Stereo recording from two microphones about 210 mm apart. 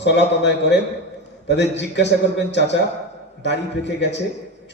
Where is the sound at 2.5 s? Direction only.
55° left (ahead or behind).